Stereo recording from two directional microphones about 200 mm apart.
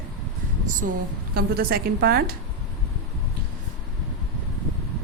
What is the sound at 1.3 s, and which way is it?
A woman's voice, 50° right (ahead or behind).